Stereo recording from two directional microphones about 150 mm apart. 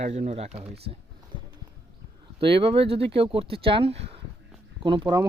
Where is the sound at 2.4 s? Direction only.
35° right (ahead or behind).